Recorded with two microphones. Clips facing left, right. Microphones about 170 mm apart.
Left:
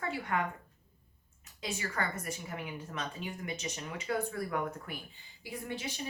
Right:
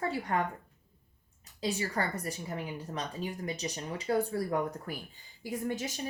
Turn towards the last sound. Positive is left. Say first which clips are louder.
# right 5 dB
turn(degrees=-45)  # may be behind; listen again after turning